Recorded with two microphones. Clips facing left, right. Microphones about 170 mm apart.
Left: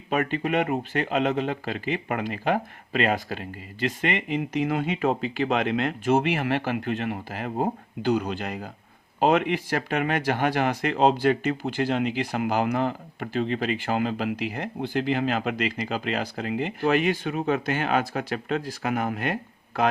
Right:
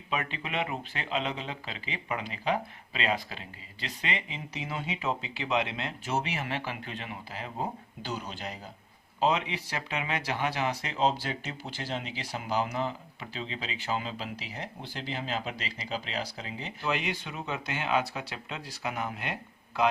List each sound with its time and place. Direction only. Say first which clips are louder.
0.1 s speech: left 9 dB; 50° left (ahead or behind)